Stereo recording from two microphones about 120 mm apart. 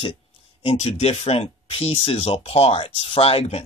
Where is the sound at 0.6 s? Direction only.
55° left (ahead or behind).